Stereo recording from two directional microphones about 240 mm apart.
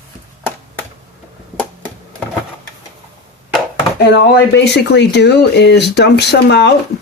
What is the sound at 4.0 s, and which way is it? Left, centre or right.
Chopping, left.